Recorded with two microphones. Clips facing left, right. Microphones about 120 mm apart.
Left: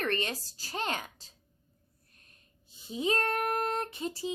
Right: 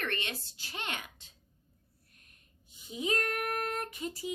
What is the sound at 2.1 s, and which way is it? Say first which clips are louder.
Child singing: left 2 dB; 35° left (ahead or behind).